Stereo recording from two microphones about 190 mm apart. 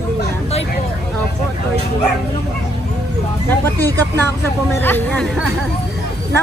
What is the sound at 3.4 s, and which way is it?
Speech, 10° left (ahead or behind).